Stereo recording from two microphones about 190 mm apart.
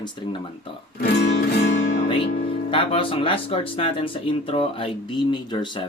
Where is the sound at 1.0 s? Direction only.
55° left (ahead or behind).